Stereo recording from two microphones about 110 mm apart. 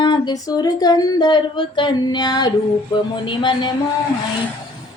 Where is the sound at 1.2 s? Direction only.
50° left (ahead or behind).